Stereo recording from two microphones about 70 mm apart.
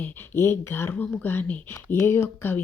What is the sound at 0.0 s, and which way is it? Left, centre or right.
Speech, left.